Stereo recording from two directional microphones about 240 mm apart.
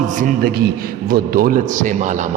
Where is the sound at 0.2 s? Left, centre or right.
Right.